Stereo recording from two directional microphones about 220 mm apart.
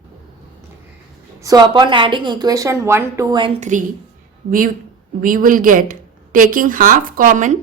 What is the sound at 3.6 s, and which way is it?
Speech, 35° right (ahead or behind).